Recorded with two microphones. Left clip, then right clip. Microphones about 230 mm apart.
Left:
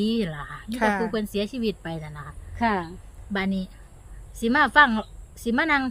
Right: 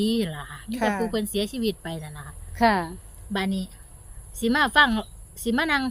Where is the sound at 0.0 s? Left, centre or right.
Centre.